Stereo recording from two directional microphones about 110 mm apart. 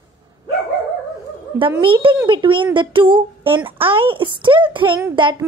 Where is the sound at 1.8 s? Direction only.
50° right (ahead or behind).